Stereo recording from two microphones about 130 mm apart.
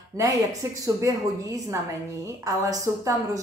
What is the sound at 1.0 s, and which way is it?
Speech, 25° right (ahead or behind).